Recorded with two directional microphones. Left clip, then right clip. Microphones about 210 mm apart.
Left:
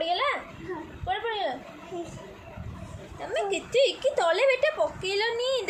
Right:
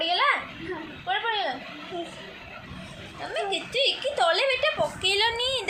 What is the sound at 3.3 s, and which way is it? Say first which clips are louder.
A woman's voice: left 1 dB; 30° left (ahead or behind).